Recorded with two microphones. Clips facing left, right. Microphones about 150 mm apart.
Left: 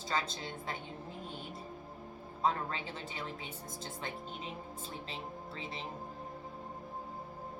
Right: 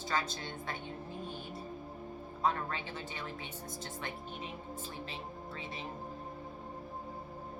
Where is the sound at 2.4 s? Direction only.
30° left (ahead or behind).